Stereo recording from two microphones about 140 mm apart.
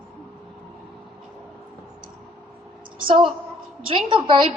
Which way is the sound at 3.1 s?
40° right (ahead or behind).